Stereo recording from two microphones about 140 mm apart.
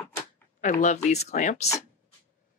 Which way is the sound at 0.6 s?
65° left (ahead or behind).